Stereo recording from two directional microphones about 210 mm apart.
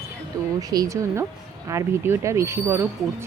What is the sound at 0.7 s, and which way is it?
Speech, 15° right (ahead or behind).